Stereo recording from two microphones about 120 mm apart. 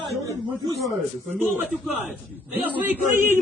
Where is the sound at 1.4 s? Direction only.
15° right (ahead or behind).